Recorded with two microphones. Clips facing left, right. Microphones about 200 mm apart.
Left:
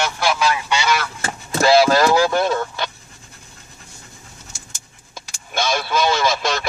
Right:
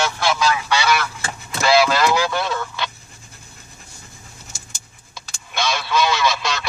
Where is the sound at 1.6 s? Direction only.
40° left (ahead or behind).